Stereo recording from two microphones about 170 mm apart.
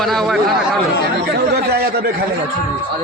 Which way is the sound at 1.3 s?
70° right (ahead or behind).